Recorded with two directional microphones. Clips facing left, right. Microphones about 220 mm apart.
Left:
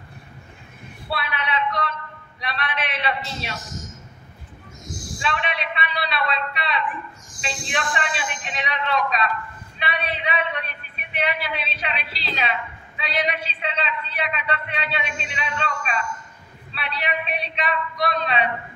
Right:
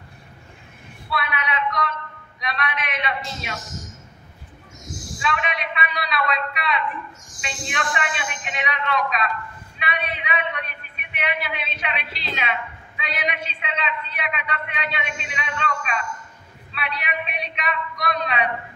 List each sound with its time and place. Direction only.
1.1 s a sound: 30° left (ahead or behind)
2.4 s a man's voice: 30° left (ahead or behind)
5.2 s a man's voice: 30° left (ahead or behind)